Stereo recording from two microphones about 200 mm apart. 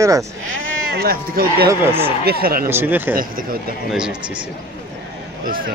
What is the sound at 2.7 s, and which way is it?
Speech, 10° right (ahead or behind).